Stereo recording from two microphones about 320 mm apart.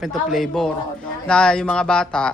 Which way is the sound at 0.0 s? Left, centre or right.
Centre.